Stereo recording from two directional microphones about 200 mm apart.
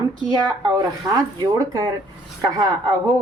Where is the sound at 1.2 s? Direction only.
15° right (ahead or behind).